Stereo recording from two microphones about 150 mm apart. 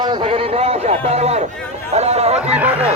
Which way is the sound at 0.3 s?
40° right (ahead or behind).